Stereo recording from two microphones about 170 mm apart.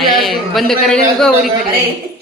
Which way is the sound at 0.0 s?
Centre (ahead or behind).